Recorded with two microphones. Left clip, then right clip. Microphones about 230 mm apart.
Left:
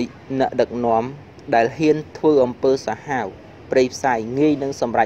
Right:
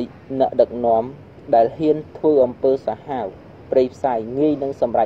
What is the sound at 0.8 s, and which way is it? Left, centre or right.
Speech, left.